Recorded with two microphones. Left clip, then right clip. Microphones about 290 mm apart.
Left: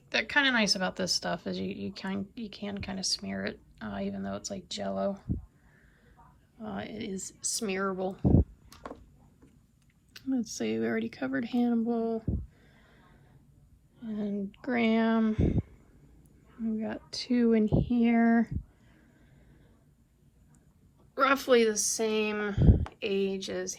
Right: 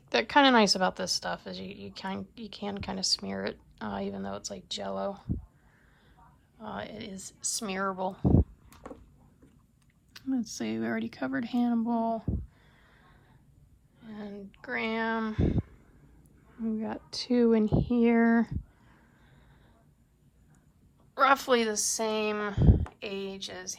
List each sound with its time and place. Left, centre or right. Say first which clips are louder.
0.1 s a woman's voice: right 4 dB; centre
6.6 s a woman's voice: even; centre
8.2 s speech: even; left
10.1 s a woman's voice: even; centre
14.0 s speech: left 7 dB; centre
16.6 s a woman's voice: even; centre
21.2 s a woman's voice: even; centre